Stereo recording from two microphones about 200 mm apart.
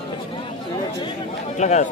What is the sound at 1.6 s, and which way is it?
Speech, 35° left (ahead or behind).